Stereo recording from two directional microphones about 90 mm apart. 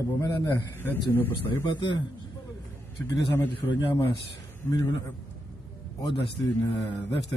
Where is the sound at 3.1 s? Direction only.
30° left (ahead or behind).